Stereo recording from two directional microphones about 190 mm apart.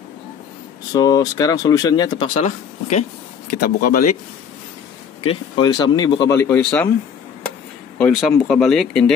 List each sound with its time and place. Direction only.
0.9 s speech: 20° left (ahead or behind); by 3.5 s 35° left (ahead or behind)
3.6 s speech: 45° left (ahead or behind)
5.3 s speech: 20° left (ahead or behind); by 6.9 s 5° left (ahead or behind)
8.0 s speech: 5° left (ahead or behind)